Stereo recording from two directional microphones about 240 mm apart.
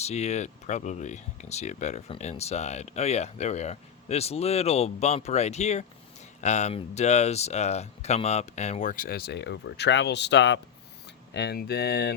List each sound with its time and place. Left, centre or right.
0.0 s speech: left